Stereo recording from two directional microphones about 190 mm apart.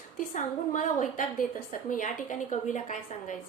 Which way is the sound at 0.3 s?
40° left (ahead or behind).